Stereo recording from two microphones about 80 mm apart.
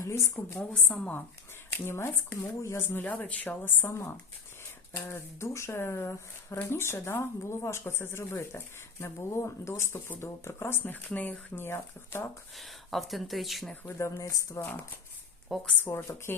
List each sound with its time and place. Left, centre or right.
0.0 s speech: left
0.6 s a woman's voice: centre
1.8 s speech: left
12.5 s speech: centre
14.4 s speech: left
15.5 s speech: centre
16.0 s speech: left